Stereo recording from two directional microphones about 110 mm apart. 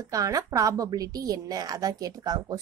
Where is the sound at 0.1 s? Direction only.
30° right (ahead or behind).